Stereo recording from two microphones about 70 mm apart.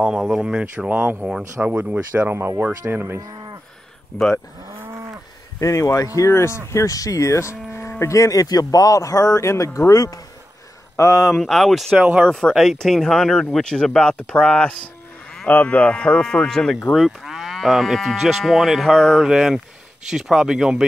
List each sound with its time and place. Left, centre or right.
0.0 s speech: centre
4.1 s speech: centre
5.6 s speech: left
6.7 s cattle: left
8.0 s speech: left
11.2 s moo: centre
12.0 s speech: right
12.3 s speech: centre
12.5 s moo: centre
14.1 s speech: centre
16.9 s moo: centre
19.2 s moo: centre
20.1 s speech: centre